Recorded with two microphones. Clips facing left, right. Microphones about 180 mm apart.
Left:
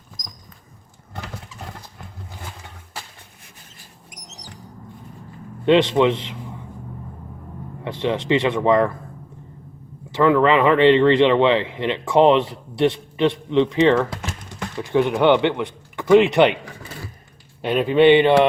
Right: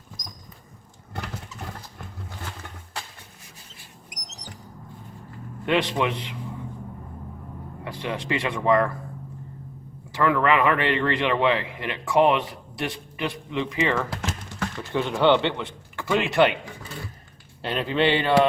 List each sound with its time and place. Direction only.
5.6 s speech: 25° left (ahead or behind)
7.9 s speech: 25° left (ahead or behind)
10.1 s speech: 25° left (ahead or behind)
14.8 s speech: 15° left (ahead or behind)
17.6 s speech: 15° left (ahead or behind)